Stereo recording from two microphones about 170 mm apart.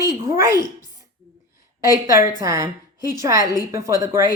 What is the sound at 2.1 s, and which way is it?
A woman's voice, 20° right (ahead or behind).